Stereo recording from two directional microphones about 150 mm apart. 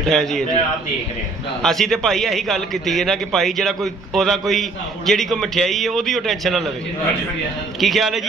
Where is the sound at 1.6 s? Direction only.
Centre (ahead or behind).